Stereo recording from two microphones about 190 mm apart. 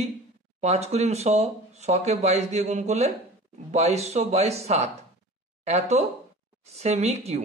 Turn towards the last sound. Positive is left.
turn(degrees=-35)  # may be behind; listen again after turning